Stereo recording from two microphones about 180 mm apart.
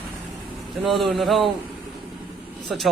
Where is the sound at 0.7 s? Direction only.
Centre (ahead or behind).